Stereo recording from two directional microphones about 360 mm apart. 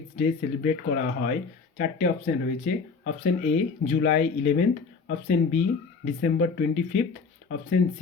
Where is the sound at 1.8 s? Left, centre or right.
Left.